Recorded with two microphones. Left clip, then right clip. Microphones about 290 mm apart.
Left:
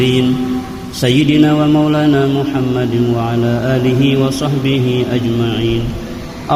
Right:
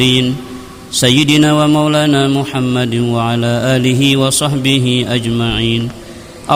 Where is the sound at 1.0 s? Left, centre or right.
Right.